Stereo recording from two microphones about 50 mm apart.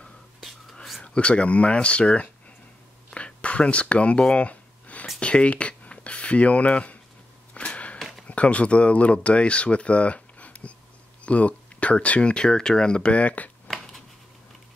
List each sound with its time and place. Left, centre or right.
1.0 s speech: left
3.2 s a sound: left
8.3 s speech: left